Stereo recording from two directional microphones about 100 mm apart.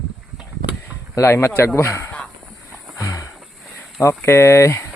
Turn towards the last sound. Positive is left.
turn(degrees=30)  # may be behind; listen again after turning